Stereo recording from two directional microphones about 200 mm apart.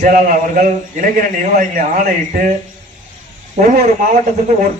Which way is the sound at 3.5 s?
40° right (ahead or behind).